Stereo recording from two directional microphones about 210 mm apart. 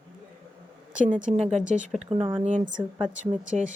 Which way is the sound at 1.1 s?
35° right (ahead or behind).